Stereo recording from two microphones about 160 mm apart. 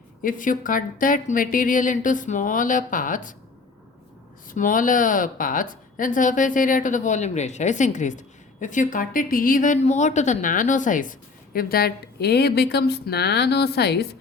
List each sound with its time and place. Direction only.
0.2 s a woman's voice: 55° left (ahead or behind)
4.4 s a woman's voice: 55° left (ahead or behind); by 14.2 s 90° left